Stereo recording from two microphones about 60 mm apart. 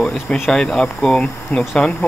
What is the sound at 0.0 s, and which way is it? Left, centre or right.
Speech, centre.